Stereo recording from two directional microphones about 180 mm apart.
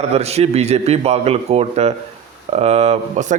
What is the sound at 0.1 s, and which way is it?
A man's voice, 35° right (ahead or behind).